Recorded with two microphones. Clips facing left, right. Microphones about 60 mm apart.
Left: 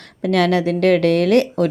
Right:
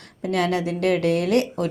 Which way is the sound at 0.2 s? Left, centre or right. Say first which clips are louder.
Left 6 dB; left.